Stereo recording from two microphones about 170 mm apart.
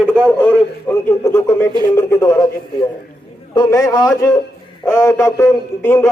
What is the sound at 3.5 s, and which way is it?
A man's voice, 20° left (ahead or behind).